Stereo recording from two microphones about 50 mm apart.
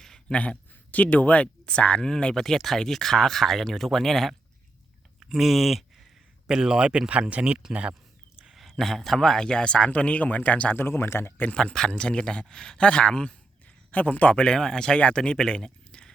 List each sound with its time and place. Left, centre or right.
0.0 s a sound: centre
0.3 s speech: left
2.0 s speech: centre
6.5 s a man's voice: centre
8.8 s speech: centre; by 10.8 s left
10.8 s speech: left
11.5 s speech: centre
13.9 s a man's voice: left
14.4 s speech: centre